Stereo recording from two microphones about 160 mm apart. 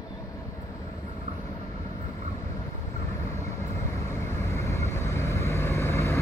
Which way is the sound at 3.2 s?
20° left (ahead or behind).